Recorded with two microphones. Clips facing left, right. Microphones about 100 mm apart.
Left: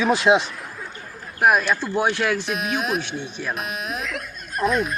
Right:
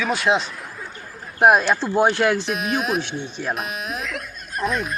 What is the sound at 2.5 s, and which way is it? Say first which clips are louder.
Speech: right 1 dB; centre (ahead or behind).